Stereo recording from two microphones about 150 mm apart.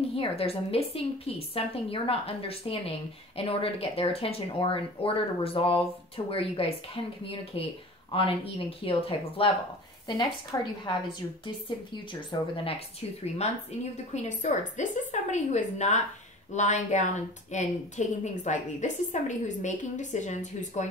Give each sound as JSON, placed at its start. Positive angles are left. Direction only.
{"t": 0.1, "sound": "speech", "side_deg": 40}
{"t": 12.1, "sound": "speech", "side_deg": 35}
{"t": 14.1, "sound": "a woman's voice", "side_deg": 55}